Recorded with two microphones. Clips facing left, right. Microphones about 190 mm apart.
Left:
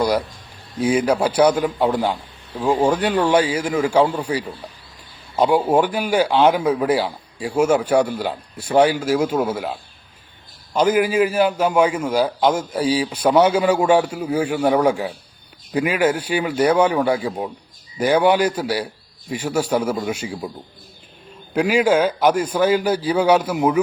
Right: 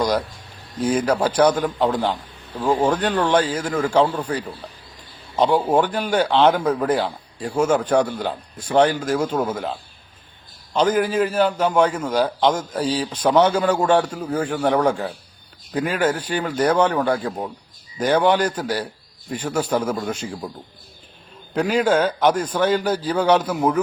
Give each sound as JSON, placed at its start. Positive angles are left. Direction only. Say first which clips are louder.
{"t": 0.0, "sound": "speech", "louder": "left 2 dB", "side_deg": 10}
{"t": 10.8, "sound": "speech", "louder": "left 2 dB", "side_deg": 10}
{"t": 21.5, "sound": "speech", "louder": "left 2 dB", "side_deg": 10}